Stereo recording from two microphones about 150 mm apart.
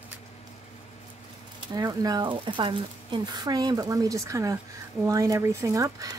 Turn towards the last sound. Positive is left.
turn(degrees=-20)  # may be behind; listen again after turning